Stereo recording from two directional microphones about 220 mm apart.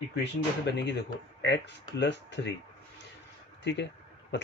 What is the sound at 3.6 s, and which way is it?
Speech, 55° left (ahead or behind).